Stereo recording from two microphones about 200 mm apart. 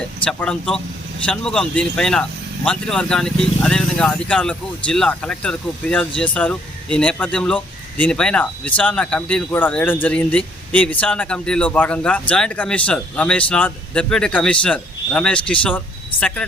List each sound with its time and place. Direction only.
0.3 s speech: 5° left (ahead or behind)